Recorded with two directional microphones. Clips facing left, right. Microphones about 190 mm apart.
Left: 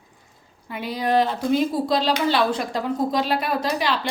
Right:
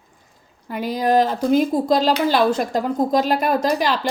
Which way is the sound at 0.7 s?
45° right (ahead or behind).